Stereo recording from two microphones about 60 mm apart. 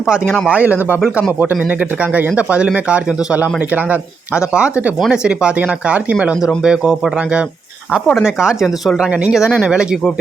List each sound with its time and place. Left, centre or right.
0.4 s a man's voice: right
2.1 s a man's voice: right
5.1 s speech: centre
6.6 s speech: centre